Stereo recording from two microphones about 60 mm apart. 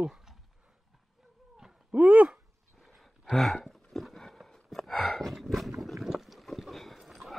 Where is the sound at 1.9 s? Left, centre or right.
Right.